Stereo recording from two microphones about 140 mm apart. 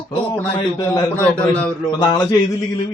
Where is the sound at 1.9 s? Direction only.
30° left (ahead or behind).